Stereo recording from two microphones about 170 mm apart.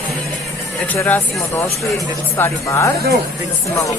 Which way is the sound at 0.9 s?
15° left (ahead or behind).